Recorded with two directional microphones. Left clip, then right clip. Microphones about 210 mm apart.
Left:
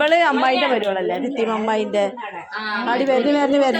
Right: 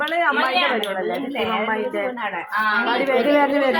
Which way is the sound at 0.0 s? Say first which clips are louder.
Left 4 dB; 50° left (ahead or behind).